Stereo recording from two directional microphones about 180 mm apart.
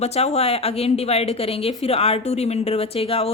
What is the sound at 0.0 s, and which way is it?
A woman's voice, 35° left (ahead or behind).